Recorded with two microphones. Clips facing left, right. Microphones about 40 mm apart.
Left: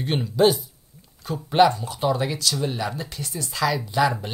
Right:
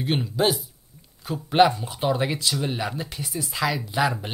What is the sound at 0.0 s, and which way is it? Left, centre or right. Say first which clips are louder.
Speech: left 3 dB; centre.